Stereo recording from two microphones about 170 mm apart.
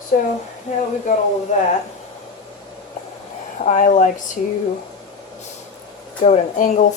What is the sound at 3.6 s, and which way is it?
Speech, 45° left (ahead or behind).